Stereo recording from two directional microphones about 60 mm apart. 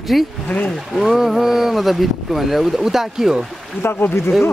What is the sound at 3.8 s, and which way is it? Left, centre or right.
Speech, left.